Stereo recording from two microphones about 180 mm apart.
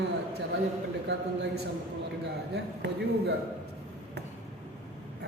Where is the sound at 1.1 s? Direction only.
65° right (ahead or behind).